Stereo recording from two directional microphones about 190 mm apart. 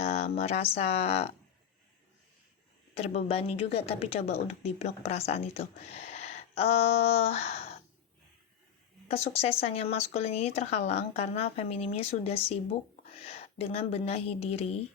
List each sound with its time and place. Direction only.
0.0 s speech: 35° left (ahead or behind)
2.9 s speech: 35° left (ahead or behind)
9.0 s speech: 30° left (ahead or behind)